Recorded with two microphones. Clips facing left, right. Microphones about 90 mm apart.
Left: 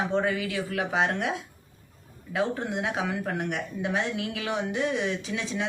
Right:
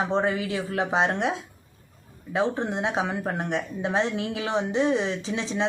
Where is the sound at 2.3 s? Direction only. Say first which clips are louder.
Right 3 dB; 25° right (ahead or behind).